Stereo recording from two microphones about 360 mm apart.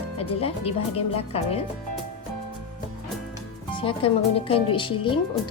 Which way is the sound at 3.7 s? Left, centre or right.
Centre.